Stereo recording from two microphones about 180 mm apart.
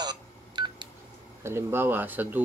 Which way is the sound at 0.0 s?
25° right (ahead or behind).